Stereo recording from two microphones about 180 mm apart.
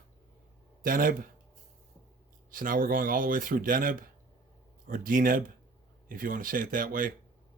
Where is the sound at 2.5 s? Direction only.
50° right (ahead or behind).